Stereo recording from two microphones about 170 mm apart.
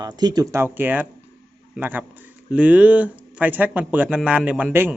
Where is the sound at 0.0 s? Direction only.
25° right (ahead or behind).